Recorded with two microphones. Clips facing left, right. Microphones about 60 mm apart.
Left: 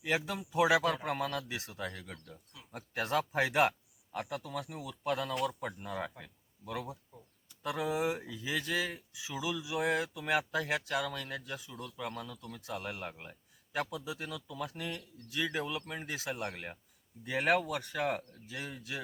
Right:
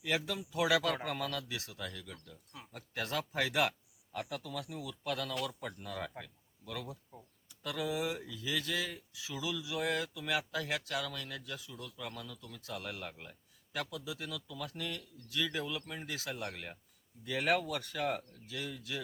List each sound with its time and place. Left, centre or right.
0.0 s speech: left
9.1 s speech: centre